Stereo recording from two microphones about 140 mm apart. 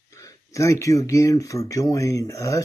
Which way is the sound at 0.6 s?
20° left (ahead or behind).